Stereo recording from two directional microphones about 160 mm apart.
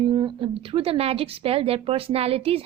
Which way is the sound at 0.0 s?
30° right (ahead or behind).